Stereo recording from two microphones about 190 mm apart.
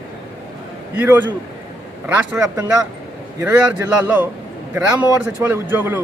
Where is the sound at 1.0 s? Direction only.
10° right (ahead or behind).